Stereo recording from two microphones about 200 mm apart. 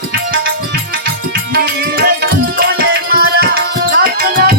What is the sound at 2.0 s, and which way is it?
Music, 50° right (ahead or behind).